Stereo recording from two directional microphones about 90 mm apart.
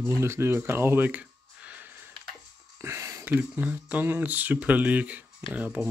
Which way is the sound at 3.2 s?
20° right (ahead or behind).